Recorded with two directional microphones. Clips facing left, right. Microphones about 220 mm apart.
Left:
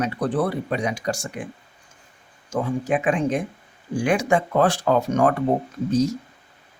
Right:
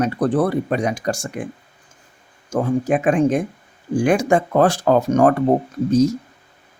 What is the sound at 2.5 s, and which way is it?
Speech, 45° right (ahead or behind).